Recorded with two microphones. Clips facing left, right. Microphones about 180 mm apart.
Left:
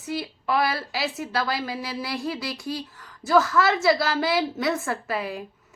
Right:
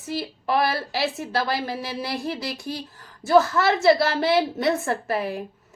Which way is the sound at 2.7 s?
25° right (ahead or behind).